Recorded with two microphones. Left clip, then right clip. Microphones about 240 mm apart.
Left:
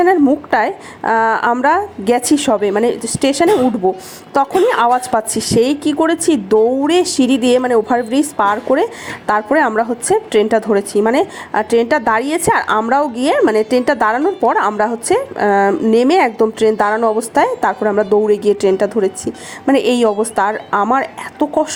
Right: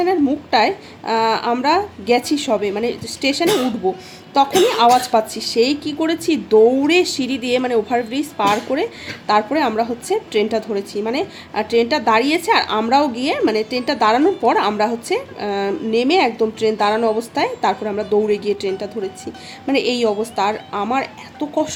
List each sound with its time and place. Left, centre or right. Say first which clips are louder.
0.0 s a woman's voice: left 6 dB; left